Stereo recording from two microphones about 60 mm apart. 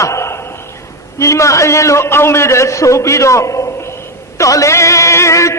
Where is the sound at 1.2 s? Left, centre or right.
Left.